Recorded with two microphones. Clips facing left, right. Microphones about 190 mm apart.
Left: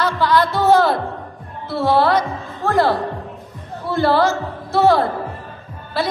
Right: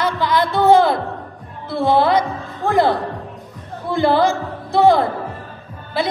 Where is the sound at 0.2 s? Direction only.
15° right (ahead or behind).